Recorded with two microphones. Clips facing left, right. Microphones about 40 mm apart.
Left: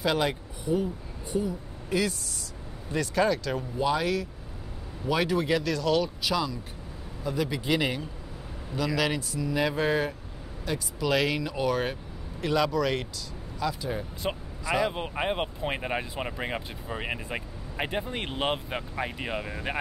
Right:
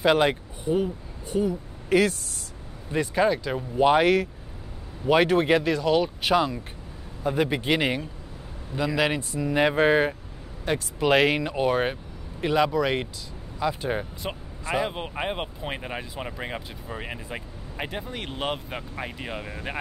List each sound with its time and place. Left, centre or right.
0.0 s speech: right
1.3 s speech: right
2.9 s speech: right
3.7 s speech: right
5.6 s speech: right
6.2 s speech: right
8.7 s speech: right
13.7 s speech: right
14.2 s speech: centre
14.6 s speech: right
14.9 s speech: centre